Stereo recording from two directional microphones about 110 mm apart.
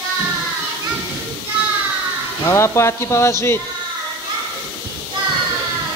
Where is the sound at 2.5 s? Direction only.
25° left (ahead or behind).